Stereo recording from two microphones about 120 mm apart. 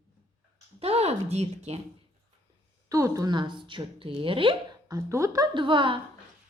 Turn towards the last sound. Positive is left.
turn(degrees=-45)  # may be behind; listen again after turning